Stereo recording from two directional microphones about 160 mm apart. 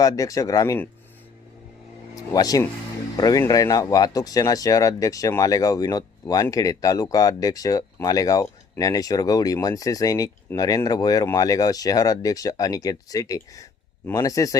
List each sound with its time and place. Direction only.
0.0 s speech: 20° left (ahead or behind)
2.1 s speech: 25° left (ahead or behind)